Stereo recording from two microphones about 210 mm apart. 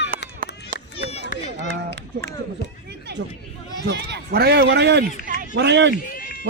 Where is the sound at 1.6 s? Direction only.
55° right (ahead or behind).